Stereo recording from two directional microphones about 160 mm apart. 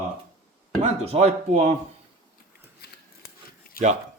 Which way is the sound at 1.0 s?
40° right (ahead or behind).